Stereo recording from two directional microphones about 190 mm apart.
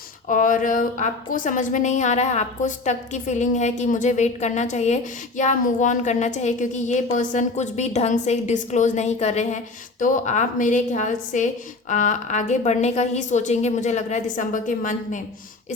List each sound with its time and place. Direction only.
0.3 s a woman's voice: 45° left (ahead or behind)